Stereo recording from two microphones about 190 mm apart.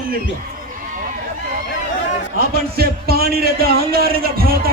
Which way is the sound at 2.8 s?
55° right (ahead or behind).